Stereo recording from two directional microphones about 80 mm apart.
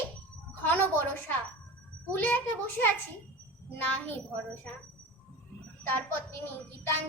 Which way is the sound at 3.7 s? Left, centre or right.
Left.